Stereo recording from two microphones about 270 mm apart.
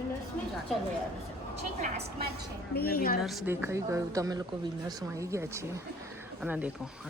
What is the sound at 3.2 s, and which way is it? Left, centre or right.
A woman's voice, centre.